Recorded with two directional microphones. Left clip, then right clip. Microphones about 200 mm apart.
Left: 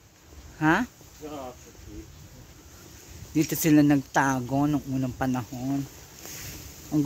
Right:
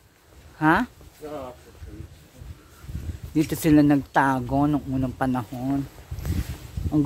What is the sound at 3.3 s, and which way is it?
Speech, 5° right (ahead or behind).